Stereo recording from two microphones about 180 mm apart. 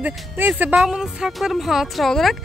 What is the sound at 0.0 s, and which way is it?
A woman's voice, 10° right (ahead or behind).